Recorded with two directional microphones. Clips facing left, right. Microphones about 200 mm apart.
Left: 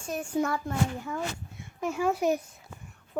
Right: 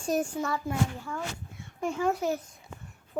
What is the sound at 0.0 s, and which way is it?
Speech, 40° right (ahead or behind).